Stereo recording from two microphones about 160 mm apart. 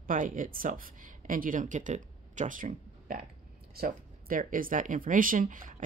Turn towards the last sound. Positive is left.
turn(degrees=-55)  # may be behind; listen again after turning